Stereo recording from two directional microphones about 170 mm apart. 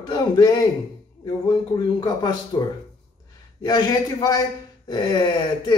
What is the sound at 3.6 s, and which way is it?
Speech, 25° left (ahead or behind).